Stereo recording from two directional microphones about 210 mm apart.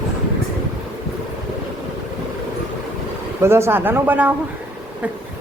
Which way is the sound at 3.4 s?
10° right (ahead or behind).